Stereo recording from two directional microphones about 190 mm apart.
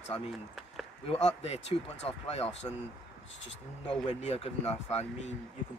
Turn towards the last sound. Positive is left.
turn(degrees=35)  # may be behind; listen again after turning